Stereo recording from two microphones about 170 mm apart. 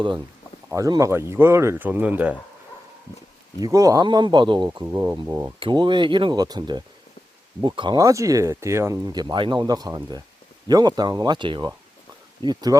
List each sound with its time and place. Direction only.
0.7 s speech: 20° right (ahead or behind)
3.6 s speech: 20° right (ahead or behind)
4.8 s speech: 15° right (ahead or behind)
5.5 s speech: 30° right (ahead or behind)